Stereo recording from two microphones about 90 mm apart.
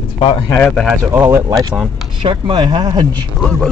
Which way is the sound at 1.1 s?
25° right (ahead or behind).